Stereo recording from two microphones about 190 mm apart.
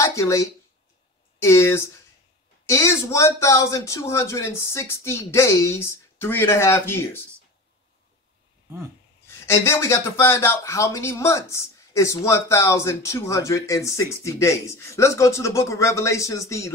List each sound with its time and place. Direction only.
0.0 s speech: 15° left (ahead or behind)
9.3 s speech: 15° left (ahead or behind)